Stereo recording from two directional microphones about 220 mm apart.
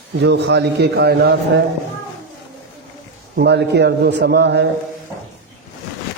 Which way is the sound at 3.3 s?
50° right (ahead or behind).